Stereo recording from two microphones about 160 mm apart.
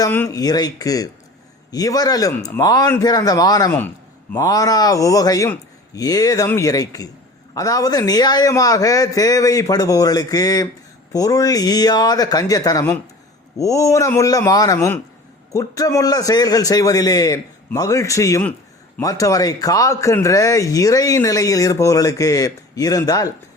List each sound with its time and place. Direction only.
0.1 s speech: 15° left (ahead or behind)
0.3 s speech: 25° left (ahead or behind)
3.7 s a sound: 10° left (ahead or behind)
4.4 s speech: 25° left (ahead or behind)